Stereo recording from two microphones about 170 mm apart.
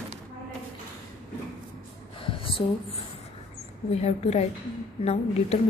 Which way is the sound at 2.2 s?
30° left (ahead or behind).